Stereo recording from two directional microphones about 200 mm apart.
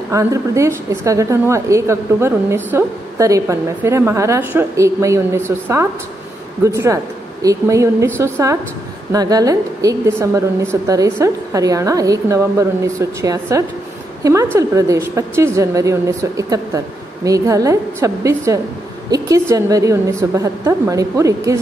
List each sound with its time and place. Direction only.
0.1 s a woman's voice: 15° right (ahead or behind)